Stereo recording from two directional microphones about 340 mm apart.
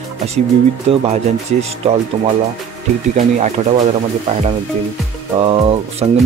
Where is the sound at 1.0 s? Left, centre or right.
Centre.